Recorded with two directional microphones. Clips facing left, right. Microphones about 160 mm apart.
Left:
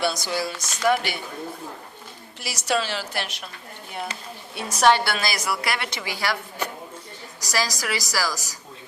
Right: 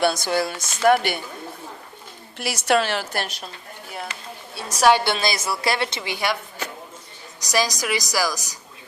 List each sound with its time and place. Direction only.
0.0 s speech: 55° right (ahead or behind)
2.4 s speech: 60° right (ahead or behind); by 3.5 s 35° right (ahead or behind)
4.8 s a woman's voice: 10° right (ahead or behind)
5.0 s a woman's voice: 25° right (ahead or behind)
7.4 s a woman's voice: 20° right (ahead or behind)